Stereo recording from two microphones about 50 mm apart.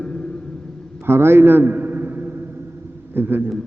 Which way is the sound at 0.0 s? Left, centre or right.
Centre.